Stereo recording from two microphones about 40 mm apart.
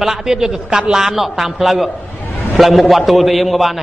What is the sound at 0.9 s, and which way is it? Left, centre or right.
A man's voice, centre.